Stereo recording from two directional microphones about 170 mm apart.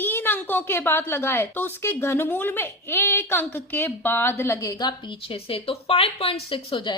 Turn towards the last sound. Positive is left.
turn(degrees=30)  # may be behind; listen again after turning